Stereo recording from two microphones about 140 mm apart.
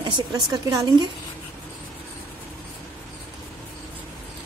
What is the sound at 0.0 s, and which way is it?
A woman's voice, 25° right (ahead or behind).